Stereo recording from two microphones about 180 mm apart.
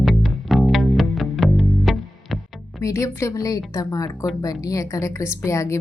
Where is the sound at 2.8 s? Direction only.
15° left (ahead or behind).